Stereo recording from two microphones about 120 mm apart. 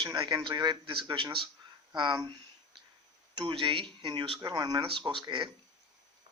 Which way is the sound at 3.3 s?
45° right (ahead or behind).